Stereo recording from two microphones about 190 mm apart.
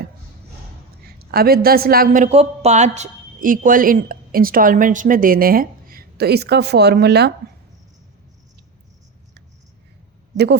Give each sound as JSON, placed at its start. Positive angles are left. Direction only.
{"t": 1.2, "sound": "a woman's voice", "side_deg": -55}
{"t": 10.3, "sound": "speech", "side_deg": -65}